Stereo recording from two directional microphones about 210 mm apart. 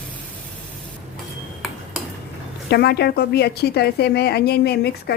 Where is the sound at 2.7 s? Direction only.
50° left (ahead or behind).